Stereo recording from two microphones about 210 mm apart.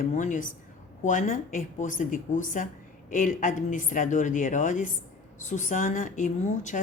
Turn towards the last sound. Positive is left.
turn(degrees=35)  # may be behind; listen again after turning